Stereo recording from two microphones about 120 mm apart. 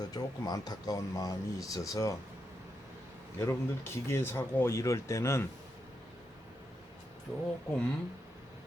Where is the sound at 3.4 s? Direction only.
20° left (ahead or behind).